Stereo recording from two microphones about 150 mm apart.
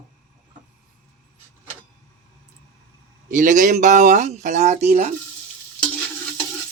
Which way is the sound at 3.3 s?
60° right (ahead or behind).